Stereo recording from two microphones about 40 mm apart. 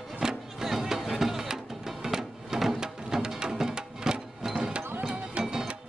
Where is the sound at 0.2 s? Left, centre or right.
Centre.